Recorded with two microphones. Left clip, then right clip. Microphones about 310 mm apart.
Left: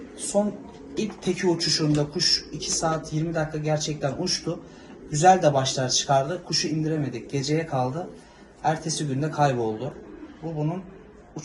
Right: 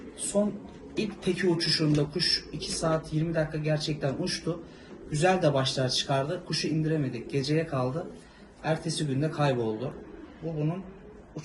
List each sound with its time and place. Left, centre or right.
0.9 s a man's voice: left